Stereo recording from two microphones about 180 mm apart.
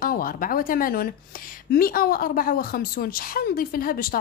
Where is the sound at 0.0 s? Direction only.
50° left (ahead or behind).